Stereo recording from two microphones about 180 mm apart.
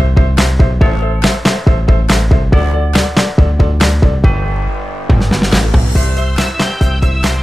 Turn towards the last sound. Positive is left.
turn(degrees=0)  # may be behind; listen again after turning